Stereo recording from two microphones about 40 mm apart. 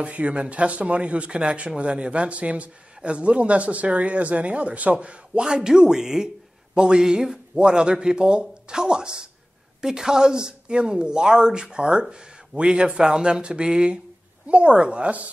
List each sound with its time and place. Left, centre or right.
0.0 s a man's voice: right
5.4 s a man's voice: centre